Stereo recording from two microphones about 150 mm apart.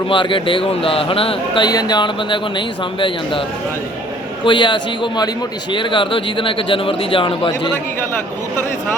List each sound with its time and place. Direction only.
0.1 s speech: 35° left (ahead or behind)
4.4 s speech: 30° left (ahead or behind)